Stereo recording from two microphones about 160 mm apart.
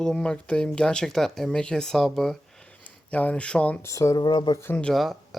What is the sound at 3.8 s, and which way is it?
Speech, 20° left (ahead or behind).